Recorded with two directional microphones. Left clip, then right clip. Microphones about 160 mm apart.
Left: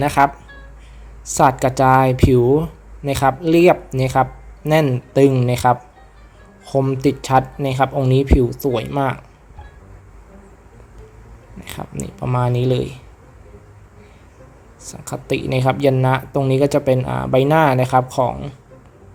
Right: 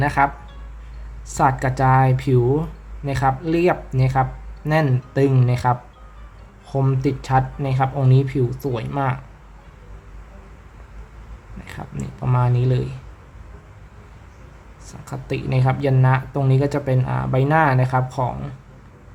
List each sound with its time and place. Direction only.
0.0 s speech: 30° left (ahead or behind)
11.6 s speech: 30° left (ahead or behind)
14.8 s speech: 30° left (ahead or behind)